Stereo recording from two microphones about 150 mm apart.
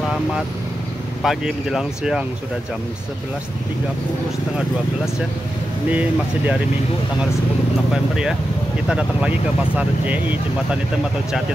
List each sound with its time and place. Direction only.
1.2 s speech: centre (ahead or behind)
5.9 s speech: 10° right (ahead or behind)
7.9 s speech: 5° right (ahead or behind)